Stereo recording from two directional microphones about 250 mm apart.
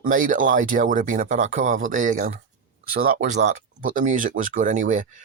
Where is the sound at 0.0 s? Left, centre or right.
Right.